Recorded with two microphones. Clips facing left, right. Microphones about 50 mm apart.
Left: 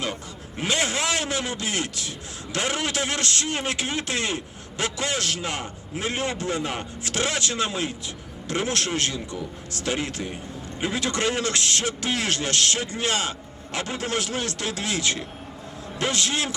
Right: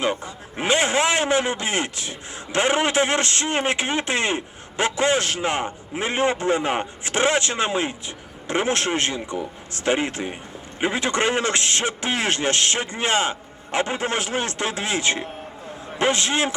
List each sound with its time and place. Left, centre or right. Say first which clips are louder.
0.0 s a man's voice: right 6 dB; right